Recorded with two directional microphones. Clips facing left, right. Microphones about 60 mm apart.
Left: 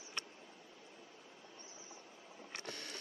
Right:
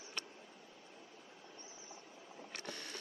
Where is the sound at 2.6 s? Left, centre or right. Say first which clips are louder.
Right 1 dB; right.